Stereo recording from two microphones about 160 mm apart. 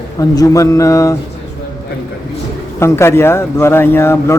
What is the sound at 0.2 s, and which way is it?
Speech, 20° left (ahead or behind).